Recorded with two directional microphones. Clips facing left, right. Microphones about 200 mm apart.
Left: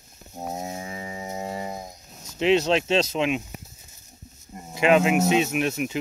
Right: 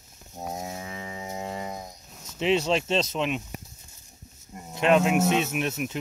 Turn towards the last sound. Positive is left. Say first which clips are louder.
# left 3 dB
turn(degrees=0)  # may be behind; listen again after turning